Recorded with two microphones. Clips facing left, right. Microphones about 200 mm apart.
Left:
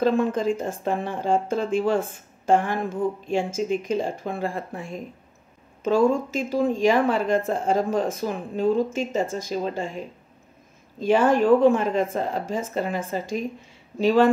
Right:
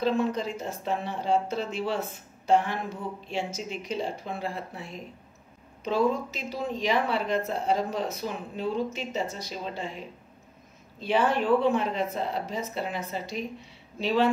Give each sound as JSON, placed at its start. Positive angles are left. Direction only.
{"t": 0.0, "sound": "speech", "side_deg": 50}